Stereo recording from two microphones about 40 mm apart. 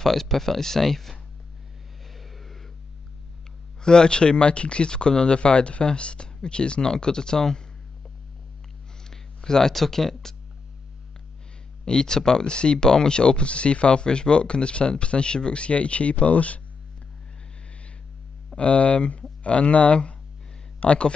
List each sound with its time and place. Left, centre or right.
0.0 s speech: centre
2.1 s a sound: centre
3.8 s speech: left
9.1 s a sound: centre
9.8 s speech: centre
11.8 s speech: centre; by 16.6 s left
18.6 s speech: left